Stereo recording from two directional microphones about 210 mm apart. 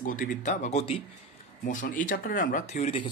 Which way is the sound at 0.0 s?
40° left (ahead or behind).